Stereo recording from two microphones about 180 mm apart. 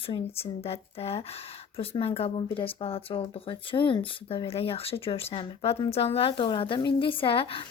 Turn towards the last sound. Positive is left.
turn(degrees=30)  # may be behind; listen again after turning